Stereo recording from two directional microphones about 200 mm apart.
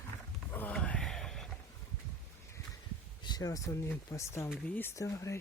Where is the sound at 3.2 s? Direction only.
20° left (ahead or behind).